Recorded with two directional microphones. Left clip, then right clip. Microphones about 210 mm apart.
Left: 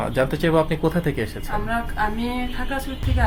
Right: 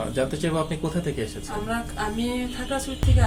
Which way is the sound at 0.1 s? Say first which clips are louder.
Left 8 dB; 45° left (ahead or behind).